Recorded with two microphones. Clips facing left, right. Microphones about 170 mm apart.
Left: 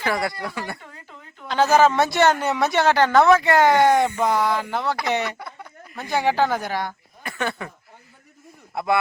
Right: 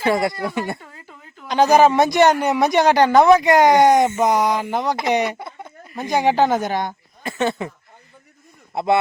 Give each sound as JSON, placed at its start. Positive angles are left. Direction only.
{"t": 0.0, "sound": "speech", "side_deg": -25}
{"t": 8.7, "sound": "speech", "side_deg": -25}